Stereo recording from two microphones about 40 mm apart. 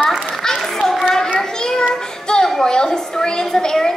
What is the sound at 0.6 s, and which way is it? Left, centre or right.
Clapping, centre.